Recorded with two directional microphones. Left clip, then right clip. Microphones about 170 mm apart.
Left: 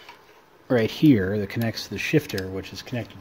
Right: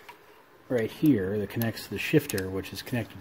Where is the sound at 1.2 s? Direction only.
20° left (ahead or behind); by 2.3 s 5° left (ahead or behind).